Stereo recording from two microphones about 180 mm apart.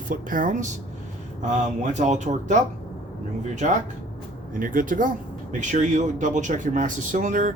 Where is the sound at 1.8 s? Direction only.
40° right (ahead or behind).